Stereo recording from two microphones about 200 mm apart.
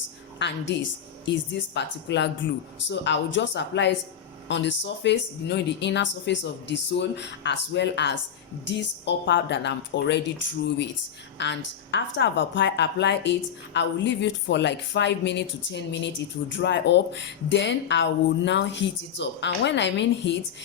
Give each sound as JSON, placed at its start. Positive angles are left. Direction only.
{"t": 0.3, "sound": "speech", "side_deg": 60}